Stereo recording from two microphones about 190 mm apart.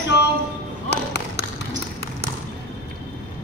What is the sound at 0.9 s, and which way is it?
Music, 60° left (ahead or behind).